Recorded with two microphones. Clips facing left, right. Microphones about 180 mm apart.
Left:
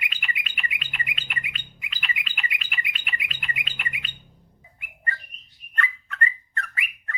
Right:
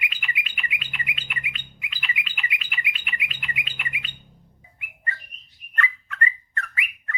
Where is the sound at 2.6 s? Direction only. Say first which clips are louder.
Right 1 dB; 45° left (ahead or behind).